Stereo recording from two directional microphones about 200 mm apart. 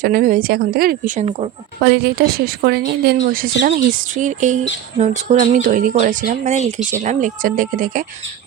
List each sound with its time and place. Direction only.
0.0 s a woman's voice: 45° right (ahead or behind)
1.8 s a woman's voice: 55° right (ahead or behind)